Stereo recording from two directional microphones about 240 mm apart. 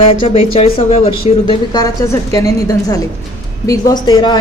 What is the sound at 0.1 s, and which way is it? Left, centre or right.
Speech, left.